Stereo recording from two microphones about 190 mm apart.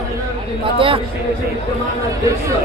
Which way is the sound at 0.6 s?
25° right (ahead or behind).